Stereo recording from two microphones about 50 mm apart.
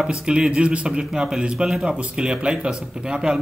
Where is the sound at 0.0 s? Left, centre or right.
Centre.